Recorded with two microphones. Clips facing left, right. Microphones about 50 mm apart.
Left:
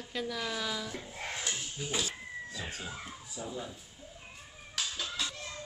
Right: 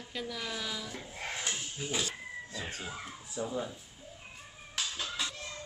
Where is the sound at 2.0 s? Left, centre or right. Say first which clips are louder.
Even; right.